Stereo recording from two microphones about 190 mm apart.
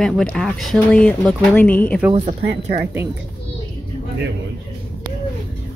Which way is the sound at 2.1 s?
40° right (ahead or behind).